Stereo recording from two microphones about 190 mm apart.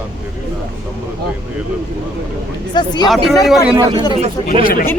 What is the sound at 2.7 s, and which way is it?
Speech, 20° left (ahead or behind).